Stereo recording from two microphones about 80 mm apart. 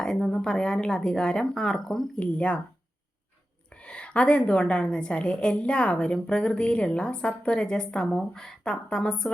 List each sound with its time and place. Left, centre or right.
0.0 s a woman's voice: centre
2.1 s a woman's voice: centre
3.8 s a woman's voice: centre